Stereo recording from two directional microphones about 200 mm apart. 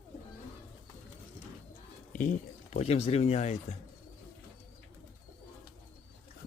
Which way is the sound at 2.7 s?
30° left (ahead or behind).